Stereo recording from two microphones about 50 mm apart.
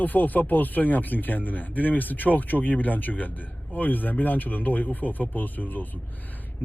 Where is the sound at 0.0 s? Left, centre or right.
Left.